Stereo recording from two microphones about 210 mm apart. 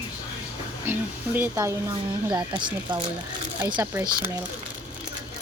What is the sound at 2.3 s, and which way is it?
Speech, 20° right (ahead or behind).